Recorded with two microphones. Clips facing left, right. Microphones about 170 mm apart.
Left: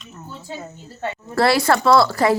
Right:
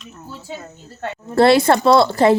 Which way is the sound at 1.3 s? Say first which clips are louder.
Right 5 dB; 25° right (ahead or behind).